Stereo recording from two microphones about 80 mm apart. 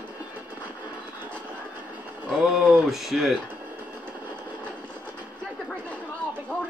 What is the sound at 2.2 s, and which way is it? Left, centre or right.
A man's voice, centre.